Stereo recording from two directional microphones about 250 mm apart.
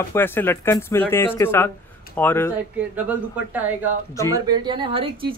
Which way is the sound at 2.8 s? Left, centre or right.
Centre.